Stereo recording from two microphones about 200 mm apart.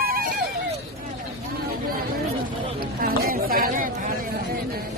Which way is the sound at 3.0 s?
45° right (ahead or behind).